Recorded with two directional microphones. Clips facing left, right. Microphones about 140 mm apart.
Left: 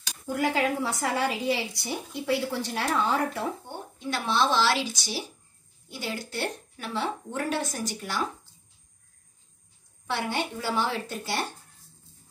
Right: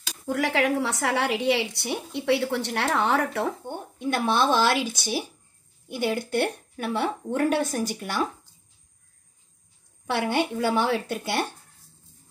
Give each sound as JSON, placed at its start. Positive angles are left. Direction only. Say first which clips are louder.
{"t": 0.3, "sound": "a woman's voice", "louder": "right 2 dB", "side_deg": -80}
{"t": 3.6, "sound": "a woman's voice", "louder": "right 5 dB", "side_deg": -55}
{"t": 10.0, "sound": "a woman's voice", "louder": "right 5 dB", "side_deg": -55}